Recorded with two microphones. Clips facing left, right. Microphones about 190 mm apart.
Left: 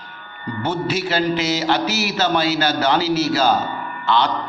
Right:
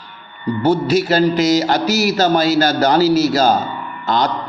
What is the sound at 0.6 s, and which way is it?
A man's voice, 40° right (ahead or behind).